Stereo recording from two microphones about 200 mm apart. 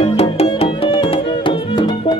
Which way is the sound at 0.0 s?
30° left (ahead or behind).